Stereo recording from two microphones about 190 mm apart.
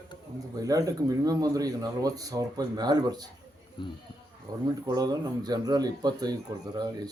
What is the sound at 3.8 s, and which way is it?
Speech, 25° left (ahead or behind).